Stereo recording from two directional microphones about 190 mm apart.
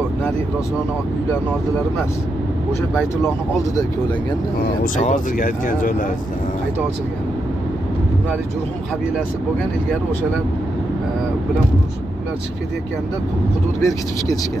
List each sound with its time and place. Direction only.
4.9 s speech: 40° left (ahead or behind)
13.8 s speech: 20° left (ahead or behind)